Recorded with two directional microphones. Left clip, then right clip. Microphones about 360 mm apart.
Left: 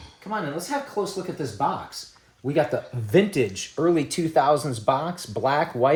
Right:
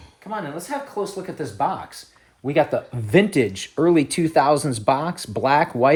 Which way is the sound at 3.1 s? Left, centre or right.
Centre.